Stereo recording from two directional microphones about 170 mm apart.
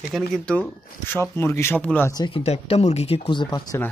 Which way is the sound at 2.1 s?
30° left (ahead or behind).